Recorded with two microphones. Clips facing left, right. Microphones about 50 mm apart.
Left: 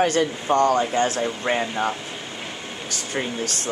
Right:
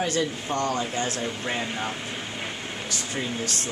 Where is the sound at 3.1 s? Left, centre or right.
Left.